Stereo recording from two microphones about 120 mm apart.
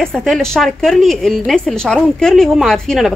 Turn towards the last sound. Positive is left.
turn(degrees=0)  # may be behind; listen again after turning